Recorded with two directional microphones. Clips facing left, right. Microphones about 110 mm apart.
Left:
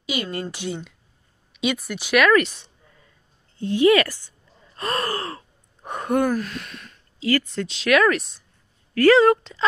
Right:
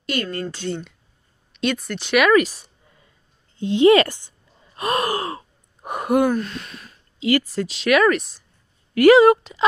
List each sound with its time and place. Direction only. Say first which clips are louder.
0.0 s speech: right 2 dB; 10° left (ahead or behind)
2.1 s speech: right 1 dB; 5° right (ahead or behind)
3.5 s a woman's voice: right 3 dB; 20° right (ahead or behind)
4.7 s gasp: right 4 dB; 15° right (ahead or behind)
6.3 s speech: right 1 dB; centre (ahead or behind)
7.2 s speech: right 2 dB; 15° right (ahead or behind); by 8.5 s centre (ahead or behind)
8.9 s speech: right 3 dB; 15° right (ahead or behind)